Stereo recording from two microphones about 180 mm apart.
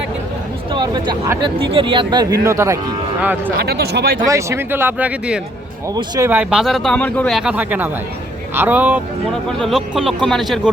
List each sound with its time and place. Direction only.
0.7 s a sound: 25° right (ahead or behind)
1.3 s speech: 25° right (ahead or behind); by 3.5 s 10° right (ahead or behind)
3.6 s speech: 60° right (ahead or behind)
4.3 s speech: 15° right (ahead or behind)
5.9 s speech: 20° right (ahead or behind)
9.3 s speech: centre (ahead or behind)